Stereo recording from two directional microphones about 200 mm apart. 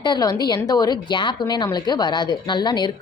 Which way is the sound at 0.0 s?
20° left (ahead or behind).